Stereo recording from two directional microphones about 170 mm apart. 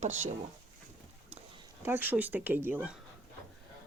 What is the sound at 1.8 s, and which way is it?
Speech, 10° right (ahead or behind).